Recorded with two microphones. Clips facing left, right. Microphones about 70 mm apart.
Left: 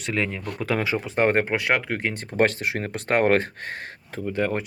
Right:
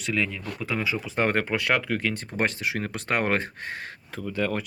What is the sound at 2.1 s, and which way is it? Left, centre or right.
Speech, left.